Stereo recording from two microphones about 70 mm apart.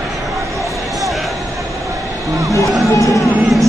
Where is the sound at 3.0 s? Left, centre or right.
Left.